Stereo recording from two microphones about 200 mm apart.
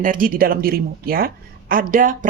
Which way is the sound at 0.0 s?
45° right (ahead or behind).